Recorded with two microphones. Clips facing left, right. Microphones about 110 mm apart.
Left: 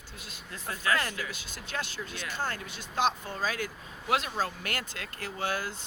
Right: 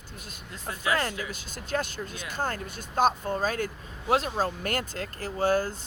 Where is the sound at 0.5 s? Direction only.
20° right (ahead or behind).